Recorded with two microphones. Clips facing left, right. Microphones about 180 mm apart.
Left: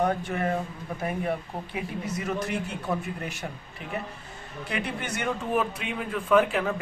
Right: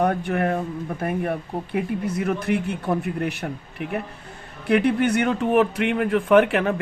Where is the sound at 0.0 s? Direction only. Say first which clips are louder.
Right 5 dB; 60° right (ahead or behind).